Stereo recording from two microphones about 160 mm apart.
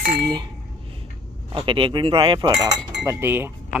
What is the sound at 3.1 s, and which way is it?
Speech, 15° right (ahead or behind).